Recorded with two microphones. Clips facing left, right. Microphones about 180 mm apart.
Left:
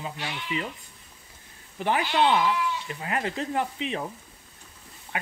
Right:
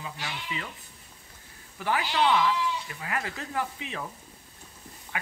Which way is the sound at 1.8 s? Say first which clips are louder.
Left 3 dB; 20° left (ahead or behind).